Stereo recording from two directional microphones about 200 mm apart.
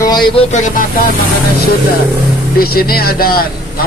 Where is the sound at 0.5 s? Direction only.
40° left (ahead or behind).